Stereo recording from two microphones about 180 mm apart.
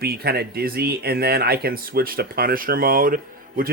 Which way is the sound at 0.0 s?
60° right (ahead or behind).